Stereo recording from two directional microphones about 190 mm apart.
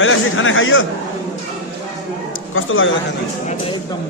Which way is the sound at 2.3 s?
90° left.